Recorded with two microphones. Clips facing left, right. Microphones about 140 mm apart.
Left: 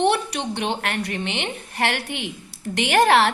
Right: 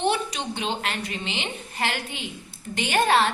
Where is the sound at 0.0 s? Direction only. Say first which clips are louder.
Left 4 dB; 70° left (ahead or behind).